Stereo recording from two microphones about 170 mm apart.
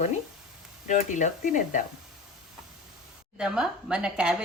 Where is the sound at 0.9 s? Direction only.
45° left (ahead or behind).